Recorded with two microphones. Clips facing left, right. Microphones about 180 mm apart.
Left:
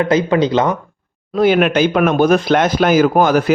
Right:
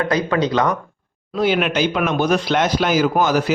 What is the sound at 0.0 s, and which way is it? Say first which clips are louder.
Speech: left 5 dB; 25° left (ahead or behind).